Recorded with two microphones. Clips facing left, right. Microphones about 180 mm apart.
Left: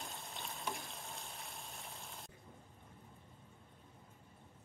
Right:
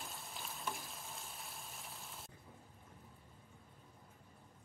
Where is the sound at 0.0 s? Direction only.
Centre (ahead or behind).